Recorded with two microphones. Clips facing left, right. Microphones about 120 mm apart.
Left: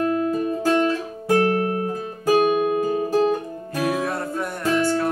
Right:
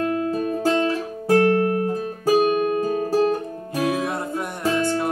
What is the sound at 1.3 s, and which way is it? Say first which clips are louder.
Guitar: right 2 dB; 25° left (ahead or behind).